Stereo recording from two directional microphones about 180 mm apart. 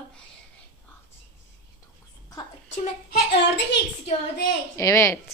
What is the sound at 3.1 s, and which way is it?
Speech, 70° left (ahead or behind).